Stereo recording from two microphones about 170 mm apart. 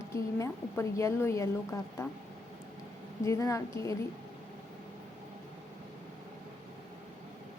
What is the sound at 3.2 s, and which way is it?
Speech, 20° left (ahead or behind).